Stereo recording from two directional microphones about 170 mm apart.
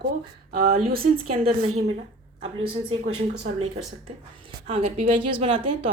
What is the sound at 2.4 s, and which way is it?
A woman's voice, 35° right (ahead or behind).